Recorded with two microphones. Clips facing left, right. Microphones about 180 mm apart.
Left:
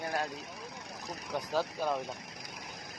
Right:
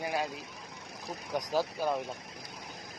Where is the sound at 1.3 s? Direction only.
10° right (ahead or behind).